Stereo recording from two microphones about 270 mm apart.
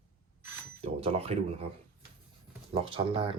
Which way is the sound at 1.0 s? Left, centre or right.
Right.